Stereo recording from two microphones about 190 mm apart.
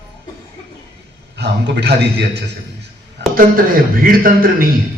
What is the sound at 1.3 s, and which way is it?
A man's voice, 60° right (ahead or behind).